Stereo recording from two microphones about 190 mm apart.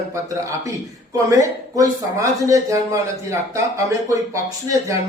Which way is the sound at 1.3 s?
15° right (ahead or behind).